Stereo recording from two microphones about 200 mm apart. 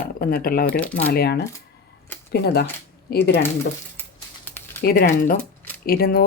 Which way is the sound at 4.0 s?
10° left (ahead or behind).